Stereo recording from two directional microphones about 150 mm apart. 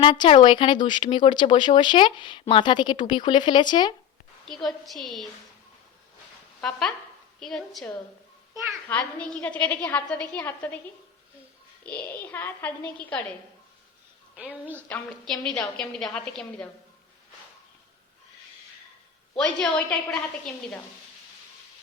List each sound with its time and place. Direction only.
0.0 s speech: 35° left (ahead or behind)
4.4 s a woman's voice: centre (ahead or behind)
6.6 s a woman's voice: 5° left (ahead or behind)
11.8 s a woman's voice: 10° left (ahead or behind)
14.3 s a woman's voice: 10° right (ahead or behind)
14.8 s a woman's voice: 10° left (ahead or behind)
19.4 s a woman's voice: 5° left (ahead or behind)